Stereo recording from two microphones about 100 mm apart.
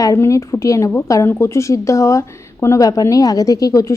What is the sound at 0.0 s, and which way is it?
Speech, 35° left (ahead or behind).